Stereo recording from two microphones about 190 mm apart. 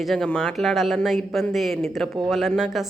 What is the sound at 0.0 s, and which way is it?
Speech, 5° left (ahead or behind).